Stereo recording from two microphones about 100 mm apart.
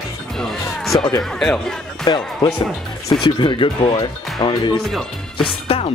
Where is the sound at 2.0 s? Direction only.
45° left (ahead or behind).